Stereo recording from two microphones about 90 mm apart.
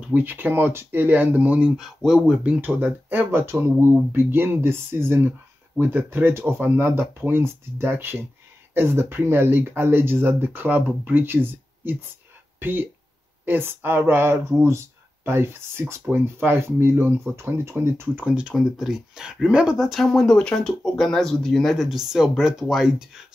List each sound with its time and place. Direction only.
0.0 s speech: 20° right (ahead or behind)
1.8 s speech: 5° right (ahead or behind)
2.6 s speech: 20° right (ahead or behind)
18.2 s speech: 15° right (ahead or behind)